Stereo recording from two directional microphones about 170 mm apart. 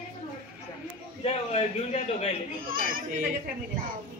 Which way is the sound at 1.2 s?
40° left (ahead or behind).